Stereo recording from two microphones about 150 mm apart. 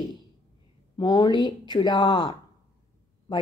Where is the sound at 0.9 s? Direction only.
30° left (ahead or behind).